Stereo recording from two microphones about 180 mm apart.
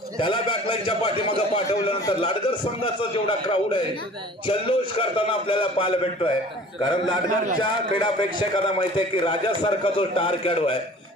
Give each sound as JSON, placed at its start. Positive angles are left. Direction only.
{"t": 0.2, "sound": "a man's voice", "side_deg": 30}
{"t": 7.6, "sound": "a man's voice", "side_deg": 25}